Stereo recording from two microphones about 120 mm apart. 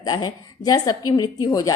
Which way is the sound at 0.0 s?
35° left (ahead or behind).